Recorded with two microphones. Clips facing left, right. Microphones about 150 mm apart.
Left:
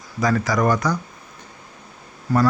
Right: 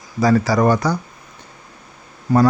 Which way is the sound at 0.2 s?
30° right (ahead or behind).